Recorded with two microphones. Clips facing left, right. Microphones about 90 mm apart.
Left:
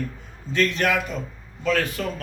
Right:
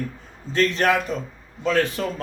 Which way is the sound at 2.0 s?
30° right (ahead or behind).